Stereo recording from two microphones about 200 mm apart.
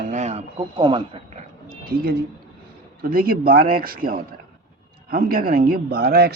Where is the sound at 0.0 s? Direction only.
35° right (ahead or behind).